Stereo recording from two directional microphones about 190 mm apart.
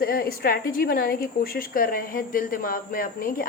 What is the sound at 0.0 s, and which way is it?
A woman's voice, 50° left (ahead or behind).